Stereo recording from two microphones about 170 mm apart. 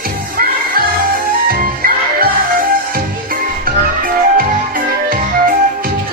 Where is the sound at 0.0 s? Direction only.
60° right (ahead or behind).